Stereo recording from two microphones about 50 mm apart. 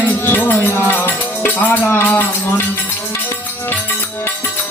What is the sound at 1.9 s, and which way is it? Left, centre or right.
Speech, left.